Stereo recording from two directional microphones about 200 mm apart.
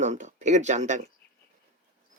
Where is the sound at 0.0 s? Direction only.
35° right (ahead or behind).